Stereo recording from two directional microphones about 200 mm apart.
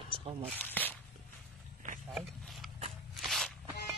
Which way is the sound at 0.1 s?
25° right (ahead or behind).